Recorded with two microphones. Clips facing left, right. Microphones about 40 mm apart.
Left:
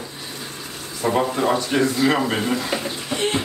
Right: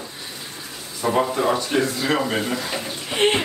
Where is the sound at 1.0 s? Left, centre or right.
Centre.